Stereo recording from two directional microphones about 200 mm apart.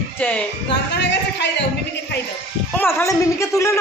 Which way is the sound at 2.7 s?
10° left (ahead or behind).